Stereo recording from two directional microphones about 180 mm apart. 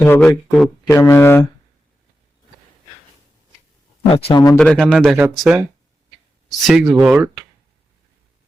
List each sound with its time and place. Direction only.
0.0 s speech: 10° left (ahead or behind)
0.9 s speech: 15° left (ahead or behind)
4.1 s speech: 30° left (ahead or behind)
4.5 s speech: 5° left (ahead or behind)
6.7 s speech: centre (ahead or behind)